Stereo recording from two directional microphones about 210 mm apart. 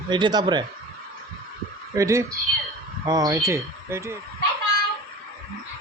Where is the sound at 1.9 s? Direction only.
15° right (ahead or behind).